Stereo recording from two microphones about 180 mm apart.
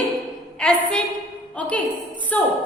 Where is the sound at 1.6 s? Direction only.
5° left (ahead or behind).